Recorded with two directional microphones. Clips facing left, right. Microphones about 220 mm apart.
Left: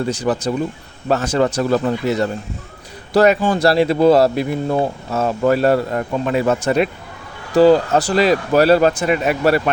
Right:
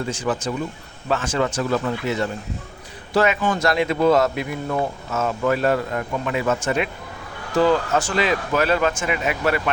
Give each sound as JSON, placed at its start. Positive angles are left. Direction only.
{"t": 0.1, "sound": "speech", "side_deg": 40}